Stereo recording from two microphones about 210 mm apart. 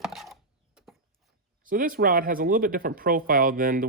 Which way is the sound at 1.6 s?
40° right (ahead or behind).